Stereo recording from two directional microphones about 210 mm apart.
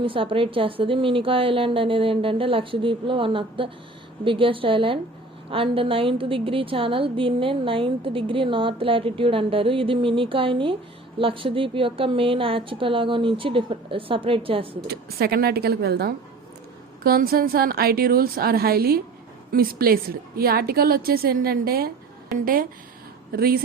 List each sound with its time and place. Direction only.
0.0 s a woman's voice: 25° right (ahead or behind)
14.8 s a woman's voice: 50° right (ahead or behind)